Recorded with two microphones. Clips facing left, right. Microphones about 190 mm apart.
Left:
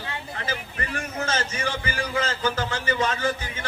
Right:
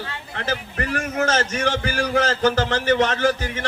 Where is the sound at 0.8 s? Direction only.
70° right (ahead or behind).